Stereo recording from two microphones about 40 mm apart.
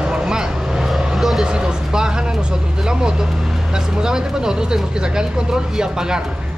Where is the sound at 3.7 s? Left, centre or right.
Centre.